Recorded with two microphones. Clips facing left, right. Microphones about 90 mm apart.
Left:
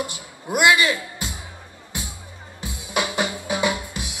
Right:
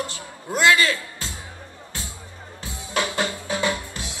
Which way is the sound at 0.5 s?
15° left (ahead or behind).